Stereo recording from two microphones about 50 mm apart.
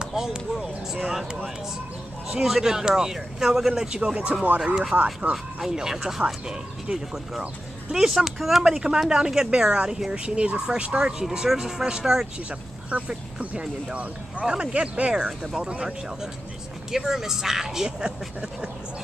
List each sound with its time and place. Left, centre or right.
0.0 s speech: centre
2.4 s speech: centre
4.9 s speech: right
5.3 s speech: centre
12.9 s speech: right
14.4 s speech: centre
15.4 s speech: centre
16.9 s speech: centre